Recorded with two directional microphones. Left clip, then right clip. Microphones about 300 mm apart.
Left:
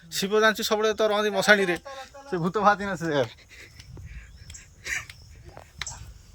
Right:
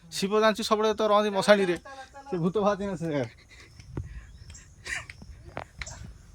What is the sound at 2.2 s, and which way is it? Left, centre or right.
Speech, left.